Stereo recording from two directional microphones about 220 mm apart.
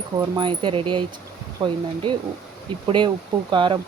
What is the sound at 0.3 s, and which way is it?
Speech, 20° right (ahead or behind).